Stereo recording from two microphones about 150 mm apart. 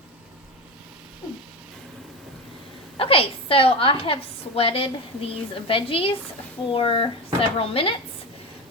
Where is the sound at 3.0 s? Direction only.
40° left (ahead or behind).